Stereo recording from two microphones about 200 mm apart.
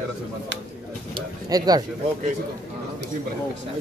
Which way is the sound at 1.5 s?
20° right (ahead or behind).